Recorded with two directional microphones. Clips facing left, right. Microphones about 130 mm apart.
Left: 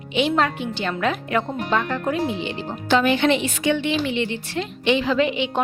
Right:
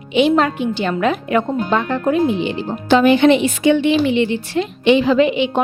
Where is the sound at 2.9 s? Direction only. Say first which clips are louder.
Right 7 dB; 15° right (ahead or behind).